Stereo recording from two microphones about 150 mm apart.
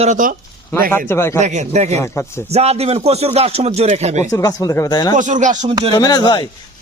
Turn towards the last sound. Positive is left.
turn(degrees=30)  # may be behind; listen again after turning